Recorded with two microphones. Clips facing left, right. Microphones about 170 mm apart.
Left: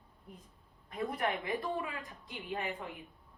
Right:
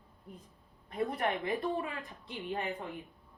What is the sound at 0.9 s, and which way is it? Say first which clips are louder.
A woman's voice: right 2 dB; 35° right (ahead or behind).